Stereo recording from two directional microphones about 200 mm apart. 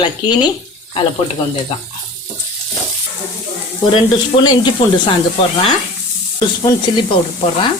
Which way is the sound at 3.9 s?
25° left (ahead or behind).